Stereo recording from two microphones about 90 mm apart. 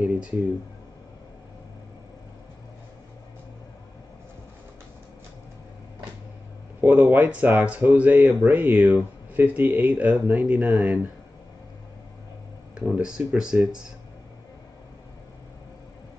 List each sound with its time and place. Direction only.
6.8 s speech: 20° right (ahead or behind)
12.7 s speech: 10° right (ahead or behind)